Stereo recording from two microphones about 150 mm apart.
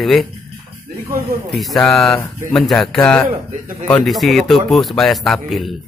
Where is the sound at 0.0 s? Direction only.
Centre (ahead or behind).